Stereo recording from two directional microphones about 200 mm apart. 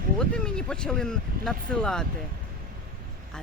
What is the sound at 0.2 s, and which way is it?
Speech, 5° left (ahead or behind).